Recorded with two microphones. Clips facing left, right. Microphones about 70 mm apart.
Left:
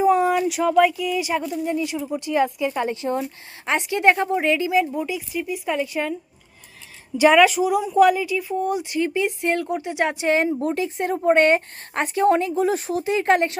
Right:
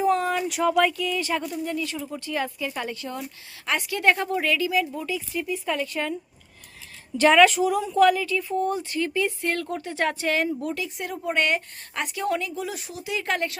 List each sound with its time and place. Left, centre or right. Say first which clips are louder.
0.0 s speech: left 5 dB; centre
1.6 s a woman's voice: left 5 dB; centre
7.2 s a woman's voice: left 2 dB; centre; by 13.6 s left